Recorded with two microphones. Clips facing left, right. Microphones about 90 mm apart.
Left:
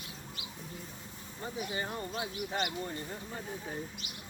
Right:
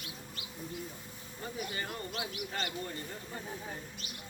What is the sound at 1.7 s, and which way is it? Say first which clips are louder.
Speech: left 3 dB; 15° left (ahead or behind).